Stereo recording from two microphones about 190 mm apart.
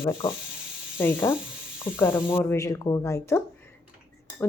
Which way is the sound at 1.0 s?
10° left (ahead or behind).